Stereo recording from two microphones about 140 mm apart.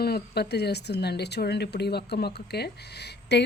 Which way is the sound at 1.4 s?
90° left.